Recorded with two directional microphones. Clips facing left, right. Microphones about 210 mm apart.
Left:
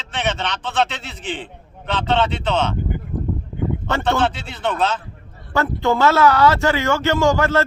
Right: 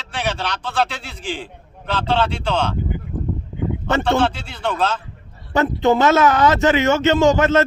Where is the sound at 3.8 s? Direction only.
20° right (ahead or behind).